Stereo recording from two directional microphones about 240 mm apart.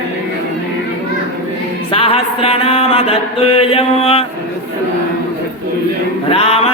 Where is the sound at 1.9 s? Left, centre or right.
Left.